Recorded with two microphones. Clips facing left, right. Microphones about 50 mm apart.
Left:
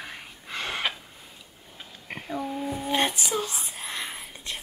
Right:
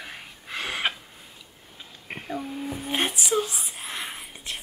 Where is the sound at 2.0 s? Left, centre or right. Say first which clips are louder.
Right 1 dB; centre.